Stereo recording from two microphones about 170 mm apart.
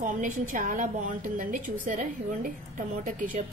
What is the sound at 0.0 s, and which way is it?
A woman's voice, 50° right (ahead or behind).